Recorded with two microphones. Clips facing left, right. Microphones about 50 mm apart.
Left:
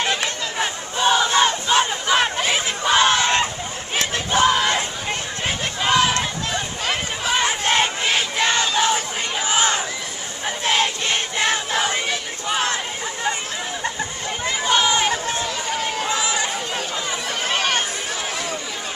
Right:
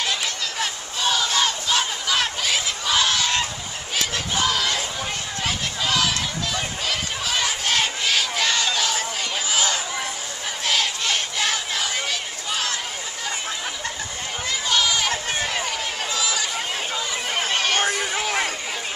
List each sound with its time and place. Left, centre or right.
0.0 s crowd: left
5.4 s a sound: left
8.7 s crowd: left
14.4 s chatter: left
17.5 s chatter: centre
17.7 s a sound: right